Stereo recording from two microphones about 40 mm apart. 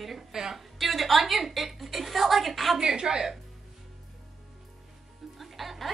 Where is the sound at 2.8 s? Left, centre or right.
Centre.